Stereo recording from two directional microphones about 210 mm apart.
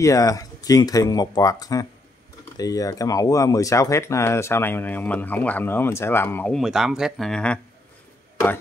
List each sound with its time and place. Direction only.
0.0 s speech: 15° left (ahead or behind)